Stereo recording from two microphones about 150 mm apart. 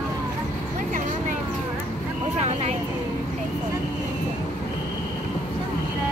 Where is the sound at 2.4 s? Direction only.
50° right (ahead or behind).